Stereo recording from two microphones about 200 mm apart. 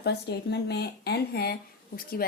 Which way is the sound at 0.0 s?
55° left (ahead or behind).